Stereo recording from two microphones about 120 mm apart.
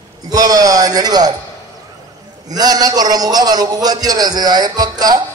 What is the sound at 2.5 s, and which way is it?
A man's voice, 35° right (ahead or behind).